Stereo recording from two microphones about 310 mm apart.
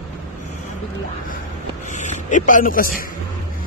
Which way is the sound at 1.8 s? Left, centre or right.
Left.